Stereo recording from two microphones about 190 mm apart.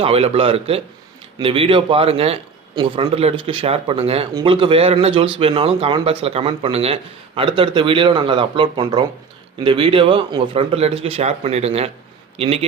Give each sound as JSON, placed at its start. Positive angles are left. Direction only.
{"t": 0.0, "sound": "speech", "side_deg": -30}